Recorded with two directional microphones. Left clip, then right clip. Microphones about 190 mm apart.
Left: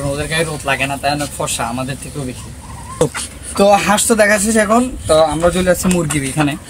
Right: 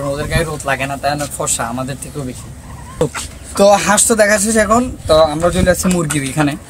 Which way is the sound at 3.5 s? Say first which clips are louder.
Right 1 dB; 15° right (ahead or behind).